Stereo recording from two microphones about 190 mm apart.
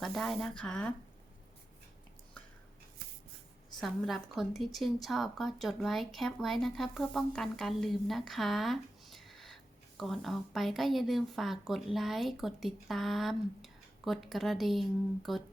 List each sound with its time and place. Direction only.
0.0 s a woman's voice: centre (ahead or behind)
3.8 s a woman's voice: centre (ahead or behind)